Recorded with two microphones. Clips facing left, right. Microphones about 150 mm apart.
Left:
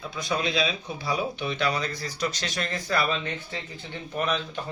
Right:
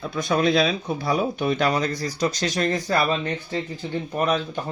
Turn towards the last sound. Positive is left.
turn(degrees=-40)  # may be behind; listen again after turning